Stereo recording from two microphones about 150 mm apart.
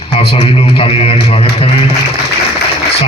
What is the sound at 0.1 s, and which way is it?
A man's voice, 40° left (ahead or behind).